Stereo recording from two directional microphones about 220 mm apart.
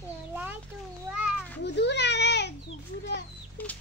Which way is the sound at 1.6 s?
50° left (ahead or behind).